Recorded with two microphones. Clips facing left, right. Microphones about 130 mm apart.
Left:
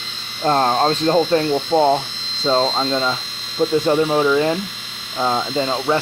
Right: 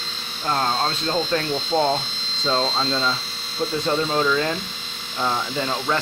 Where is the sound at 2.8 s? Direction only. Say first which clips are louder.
Left 4 dB; 15° left (ahead or behind).